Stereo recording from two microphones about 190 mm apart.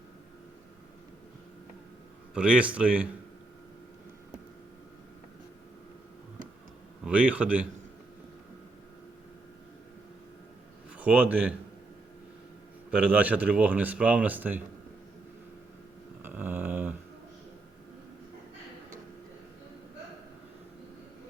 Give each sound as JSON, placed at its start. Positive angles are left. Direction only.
{"t": 2.3, "sound": "speech", "side_deg": -5}
{"t": 7.0, "sound": "a man's voice", "side_deg": -5}
{"t": 10.9, "sound": "a man's voice", "side_deg": -5}
{"t": 12.9, "sound": "speech", "side_deg": -5}
{"t": 16.2, "sound": "a sound", "side_deg": -10}